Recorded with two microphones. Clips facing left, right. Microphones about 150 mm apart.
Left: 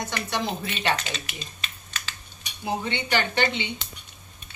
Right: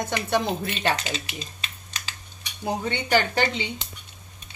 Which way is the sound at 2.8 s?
45° right (ahead or behind).